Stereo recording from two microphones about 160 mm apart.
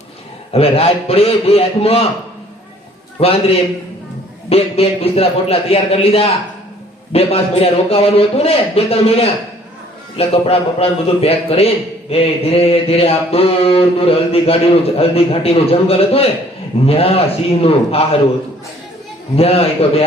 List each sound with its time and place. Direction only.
0.5 s mantra: 40° left (ahead or behind)
3.2 s mantra: 40° left (ahead or behind)
19.4 s mantra: 40° left (ahead or behind)